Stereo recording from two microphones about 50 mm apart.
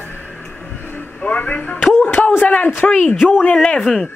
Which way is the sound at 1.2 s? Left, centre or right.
Left.